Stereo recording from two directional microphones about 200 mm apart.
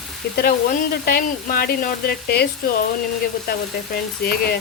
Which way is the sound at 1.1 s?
50° left (ahead or behind).